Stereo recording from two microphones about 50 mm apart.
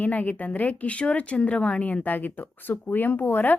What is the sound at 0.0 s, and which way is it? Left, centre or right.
Speech, left.